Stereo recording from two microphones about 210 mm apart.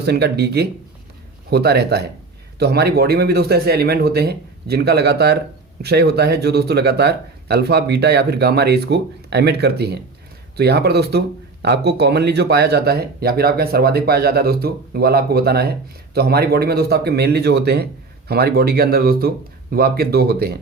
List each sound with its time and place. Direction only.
0.0 s speech: 50° right (ahead or behind)